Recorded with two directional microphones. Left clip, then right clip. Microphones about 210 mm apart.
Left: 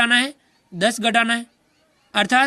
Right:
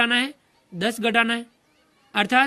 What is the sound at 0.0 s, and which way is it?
A man's voice, 30° left (ahead or behind).